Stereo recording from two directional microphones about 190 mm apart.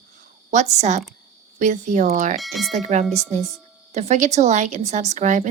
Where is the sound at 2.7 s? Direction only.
35° right (ahead or behind).